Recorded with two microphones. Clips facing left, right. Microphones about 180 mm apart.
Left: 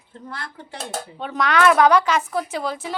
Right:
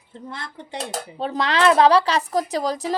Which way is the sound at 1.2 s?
30° right (ahead or behind).